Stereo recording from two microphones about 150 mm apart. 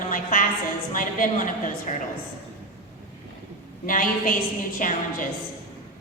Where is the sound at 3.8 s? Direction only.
65° left (ahead or behind).